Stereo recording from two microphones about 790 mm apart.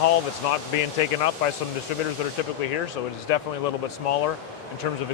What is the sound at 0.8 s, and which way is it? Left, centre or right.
Speech, left.